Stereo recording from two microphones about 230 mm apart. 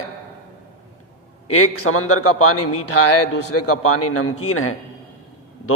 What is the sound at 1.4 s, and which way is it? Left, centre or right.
A man's voice, left.